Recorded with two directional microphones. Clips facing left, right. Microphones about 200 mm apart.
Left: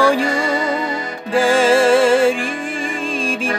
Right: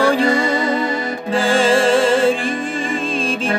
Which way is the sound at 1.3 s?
10° left (ahead or behind).